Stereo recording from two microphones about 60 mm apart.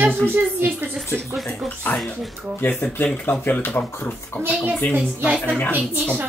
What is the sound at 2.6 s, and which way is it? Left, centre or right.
Speech, left.